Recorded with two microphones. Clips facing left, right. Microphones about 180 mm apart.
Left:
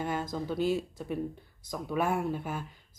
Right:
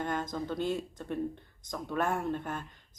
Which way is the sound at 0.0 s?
5° left (ahead or behind).